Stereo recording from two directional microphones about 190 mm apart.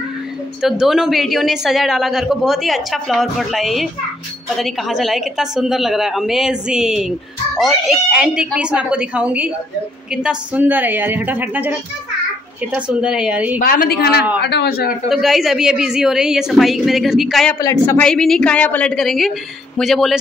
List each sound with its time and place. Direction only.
0.6 s a woman's voice: centre (ahead or behind)
12.7 s a woman's voice: 5° right (ahead or behind)
13.6 s a woman's voice: 50° left (ahead or behind)
15.0 s a woman's voice: centre (ahead or behind)
17.6 s a woman's voice: 15° left (ahead or behind); by 20.2 s centre (ahead or behind)